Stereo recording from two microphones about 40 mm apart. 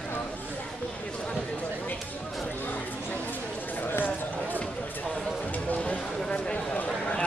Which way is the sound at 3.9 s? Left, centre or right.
Left.